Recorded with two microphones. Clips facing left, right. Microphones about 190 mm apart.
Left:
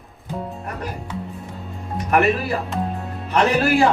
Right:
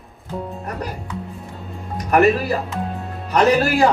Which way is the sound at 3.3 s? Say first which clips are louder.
Right 2 dB; 40° right (ahead or behind).